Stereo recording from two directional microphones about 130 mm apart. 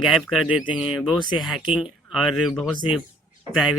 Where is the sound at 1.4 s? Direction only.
5° right (ahead or behind).